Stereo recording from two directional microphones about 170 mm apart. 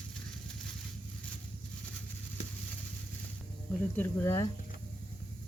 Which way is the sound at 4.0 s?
15° left (ahead or behind).